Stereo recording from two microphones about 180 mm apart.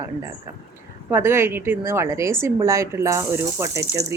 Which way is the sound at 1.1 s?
15° right (ahead or behind).